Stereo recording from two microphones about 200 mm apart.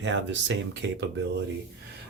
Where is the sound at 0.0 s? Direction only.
65° right (ahead or behind).